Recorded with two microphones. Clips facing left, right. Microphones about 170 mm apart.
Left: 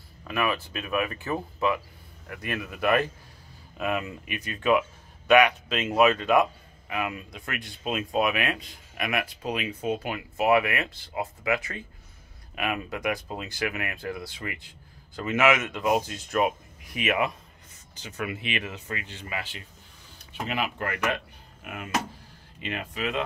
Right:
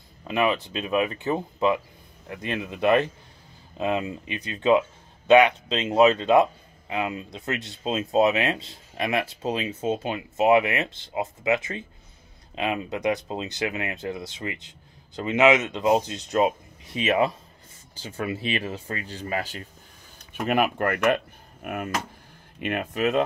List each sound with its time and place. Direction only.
0.2 s speech: 25° right (ahead or behind); by 19.6 s 40° right (ahead or behind)
20.3 s speech: 50° right (ahead or behind)